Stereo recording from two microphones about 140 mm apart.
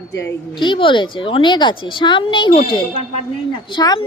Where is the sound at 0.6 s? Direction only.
35° left (ahead or behind).